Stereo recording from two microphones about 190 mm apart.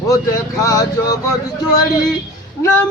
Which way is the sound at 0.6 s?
20° left (ahead or behind).